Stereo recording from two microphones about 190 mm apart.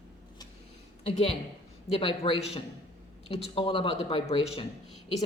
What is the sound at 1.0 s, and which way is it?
Speech, 30° left (ahead or behind).